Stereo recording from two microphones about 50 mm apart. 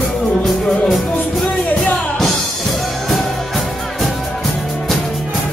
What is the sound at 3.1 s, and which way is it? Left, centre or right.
Music, centre.